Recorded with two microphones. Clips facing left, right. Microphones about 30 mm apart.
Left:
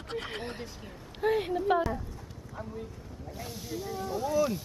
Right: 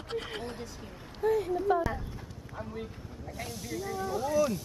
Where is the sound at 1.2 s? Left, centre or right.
Left.